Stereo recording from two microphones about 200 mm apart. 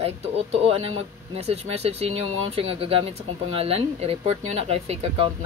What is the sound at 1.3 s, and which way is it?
Speech, 30° right (ahead or behind).